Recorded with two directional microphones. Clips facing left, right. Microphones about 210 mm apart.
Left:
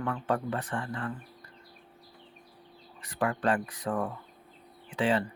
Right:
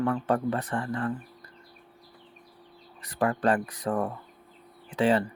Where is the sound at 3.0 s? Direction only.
35° right (ahead or behind).